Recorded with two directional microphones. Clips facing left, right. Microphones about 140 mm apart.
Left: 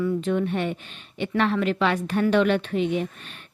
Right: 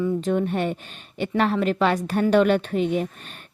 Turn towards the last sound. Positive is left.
turn(degrees=-40)  # may be behind; listen again after turning